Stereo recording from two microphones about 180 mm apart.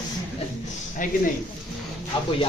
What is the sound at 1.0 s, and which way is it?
Speech, 45° left (ahead or behind).